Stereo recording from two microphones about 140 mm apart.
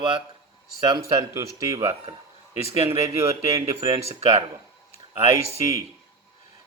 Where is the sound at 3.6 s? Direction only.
25° right (ahead or behind).